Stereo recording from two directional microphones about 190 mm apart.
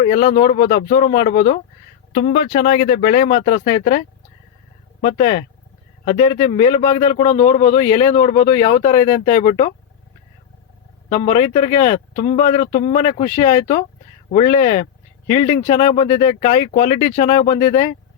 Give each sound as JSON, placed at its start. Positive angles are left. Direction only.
{"t": 0.0, "sound": "speech", "side_deg": 35}
{"t": 2.1, "sound": "speech", "side_deg": 50}
{"t": 11.1, "sound": "speech", "side_deg": 35}